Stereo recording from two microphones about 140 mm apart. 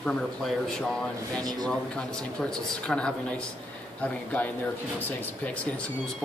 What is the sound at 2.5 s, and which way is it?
Speech, 5° left (ahead or behind).